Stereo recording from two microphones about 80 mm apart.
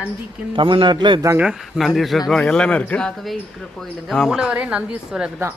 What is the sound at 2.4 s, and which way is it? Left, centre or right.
Speech, centre.